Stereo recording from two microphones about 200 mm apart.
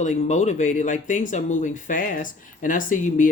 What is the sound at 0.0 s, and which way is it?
Speech, 35° left (ahead or behind).